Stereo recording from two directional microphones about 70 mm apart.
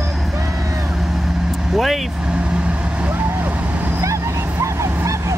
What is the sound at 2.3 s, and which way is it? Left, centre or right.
Vehicle, centre.